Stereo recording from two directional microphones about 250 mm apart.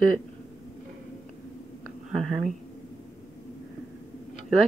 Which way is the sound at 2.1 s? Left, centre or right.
Centre.